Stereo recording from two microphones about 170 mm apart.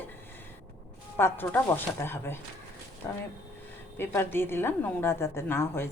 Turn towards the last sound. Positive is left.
turn(degrees=15)  # may be behind; listen again after turning